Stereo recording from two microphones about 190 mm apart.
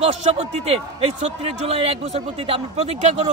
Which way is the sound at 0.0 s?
35° right (ahead or behind).